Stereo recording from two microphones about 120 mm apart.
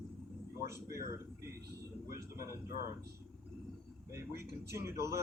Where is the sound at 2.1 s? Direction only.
25° right (ahead or behind).